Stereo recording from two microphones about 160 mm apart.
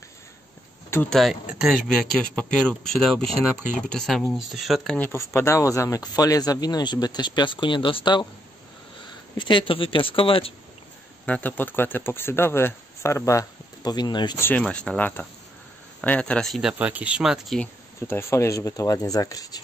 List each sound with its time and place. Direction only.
1.1 s speech: centre (ahead or behind); by 8.3 s 30° left (ahead or behind)
9.4 s speech: 30° left (ahead or behind)
11.2 s speech: 10° left (ahead or behind); by 14.4 s 25° left (ahead or behind)
14.4 s speech: 10° left (ahead or behind)
18.0 s speech: 15° left (ahead or behind)